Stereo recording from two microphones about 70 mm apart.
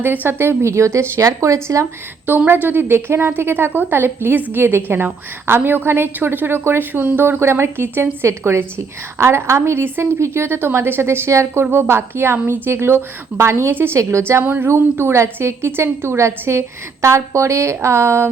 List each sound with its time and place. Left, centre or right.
0.0 s a woman's voice: right
2.5 s a woman's voice: right
14.4 s a woman's voice: right